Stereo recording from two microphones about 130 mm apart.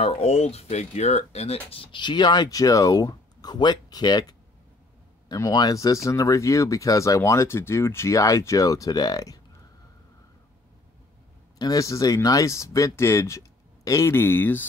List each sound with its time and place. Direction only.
0.0 s speech: 55° left (ahead or behind)
1.7 s speech: 40° left (ahead or behind)
11.5 s speech: 30° left (ahead or behind)